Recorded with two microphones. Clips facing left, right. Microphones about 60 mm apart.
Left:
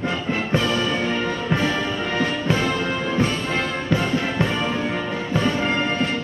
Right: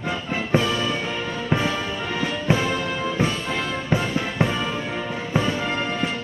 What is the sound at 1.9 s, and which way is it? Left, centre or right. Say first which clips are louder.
Music: left 3 dB; left.